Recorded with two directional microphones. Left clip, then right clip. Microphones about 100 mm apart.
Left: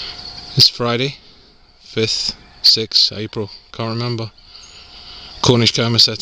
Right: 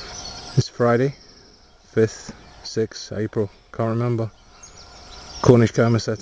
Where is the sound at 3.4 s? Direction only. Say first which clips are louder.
Right 1 dB; 25° left (ahead or behind).